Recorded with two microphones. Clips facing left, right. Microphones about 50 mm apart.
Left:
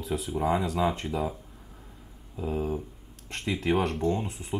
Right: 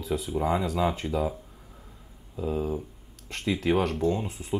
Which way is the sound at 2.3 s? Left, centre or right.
Left.